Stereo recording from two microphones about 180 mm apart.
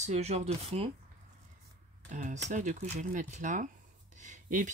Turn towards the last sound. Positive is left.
turn(degrees=-45)  # may be behind; listen again after turning